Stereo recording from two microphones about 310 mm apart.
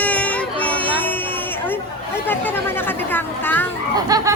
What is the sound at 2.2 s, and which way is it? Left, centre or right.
Chatter, centre.